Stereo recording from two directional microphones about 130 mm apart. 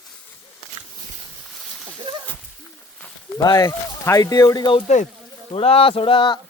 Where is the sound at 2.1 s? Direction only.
40° right (ahead or behind).